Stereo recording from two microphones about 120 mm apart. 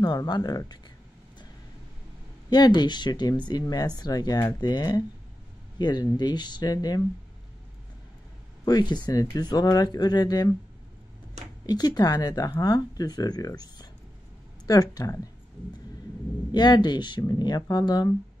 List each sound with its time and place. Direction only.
0.0 s speech: 35° left (ahead or behind)
2.5 s speech: 35° left (ahead or behind)
8.6 s speech: 35° left (ahead or behind)
11.6 s speech: 35° left (ahead or behind)
16.5 s speech: 35° left (ahead or behind)